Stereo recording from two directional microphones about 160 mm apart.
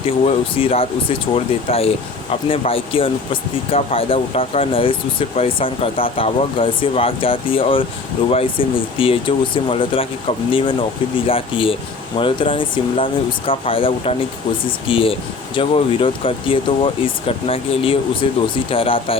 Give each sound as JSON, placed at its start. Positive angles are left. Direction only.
{"t": 0.0, "sound": "speech", "side_deg": 35}